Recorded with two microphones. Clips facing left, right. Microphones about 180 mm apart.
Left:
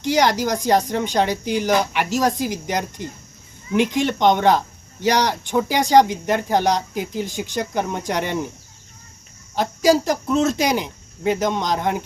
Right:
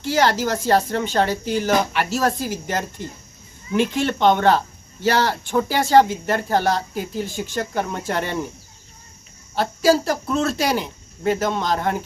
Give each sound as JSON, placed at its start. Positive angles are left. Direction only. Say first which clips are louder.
{"t": 0.0, "sound": "speech", "louder": "left 1 dB", "side_deg": 15}
{"t": 9.6, "sound": "speech", "louder": "left 1 dB", "side_deg": 15}